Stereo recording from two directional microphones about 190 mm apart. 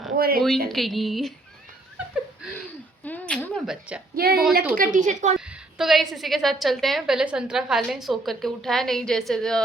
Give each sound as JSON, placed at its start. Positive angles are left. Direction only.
{"t": 0.2, "sound": "speech", "side_deg": -50}
{"t": 0.7, "sound": "a woman's voice", "side_deg": 0}
{"t": 3.0, "sound": "a sound", "side_deg": 5}
{"t": 4.1, "sound": "speech", "side_deg": -55}
{"t": 5.7, "sound": "a woman's voice", "side_deg": 0}